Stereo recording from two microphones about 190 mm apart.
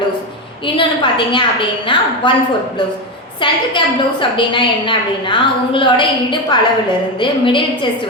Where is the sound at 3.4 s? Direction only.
25° left (ahead or behind).